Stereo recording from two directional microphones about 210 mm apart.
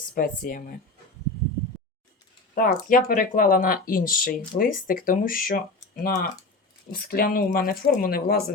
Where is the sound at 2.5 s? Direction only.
40° left (ahead or behind).